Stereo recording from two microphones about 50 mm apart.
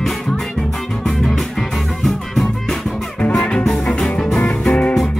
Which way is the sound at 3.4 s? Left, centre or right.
Left.